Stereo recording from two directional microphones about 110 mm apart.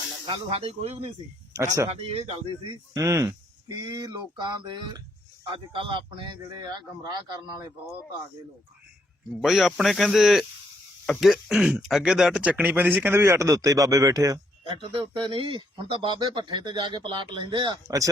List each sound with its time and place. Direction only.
0.3 s speech: 65° right (ahead or behind)
1.5 s speech: 30° right (ahead or behind)
1.9 s speech: 60° right (ahead or behind)
2.6 s speech: 35° right (ahead or behind)
5.7 s speech: 50° right (ahead or behind)
9.4 s speech: 5° right (ahead or behind); by 14.3 s 30° right (ahead or behind)
14.6 s speech: 55° right (ahead or behind); by 18.1 s 35° right (ahead or behind)